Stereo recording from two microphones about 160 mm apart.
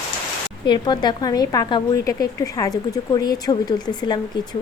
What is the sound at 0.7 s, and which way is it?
A woman's voice, 25° left (ahead or behind).